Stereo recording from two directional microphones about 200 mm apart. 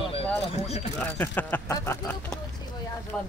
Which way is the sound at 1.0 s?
10° left (ahead or behind).